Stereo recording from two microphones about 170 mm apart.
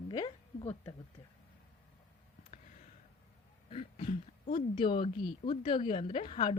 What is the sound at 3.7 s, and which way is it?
A woman's voice, 35° left (ahead or behind).